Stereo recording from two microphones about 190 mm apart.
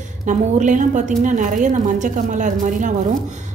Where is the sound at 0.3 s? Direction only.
40° right (ahead or behind).